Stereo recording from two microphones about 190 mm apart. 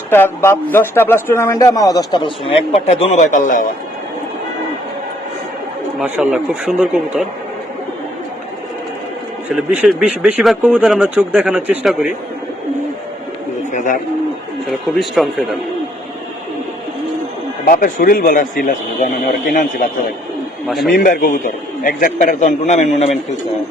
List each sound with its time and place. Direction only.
0.1 s a man's voice: 10° left (ahead or behind); by 3.7 s 45° left (ahead or behind)
6.0 s speech: 5° right (ahead or behind)
9.5 s speech: centre (ahead or behind)
13.7 s a man's voice: 45° left (ahead or behind)
14.7 s speech: centre (ahead or behind)
17.7 s a man's voice: 50° left (ahead or behind)
20.7 s speech: centre (ahead or behind)
20.9 s a man's voice: 50° left (ahead or behind)